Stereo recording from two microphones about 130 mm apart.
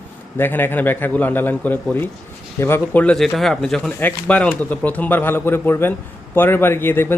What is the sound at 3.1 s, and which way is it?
A man's voice, centre (ahead or behind).